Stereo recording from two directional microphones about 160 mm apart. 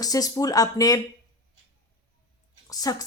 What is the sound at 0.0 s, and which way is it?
A woman's voice, 25° left (ahead or behind).